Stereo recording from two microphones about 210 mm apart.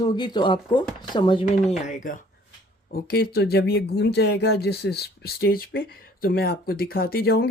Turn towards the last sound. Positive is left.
turn(degrees=45)  # may be behind; listen again after turning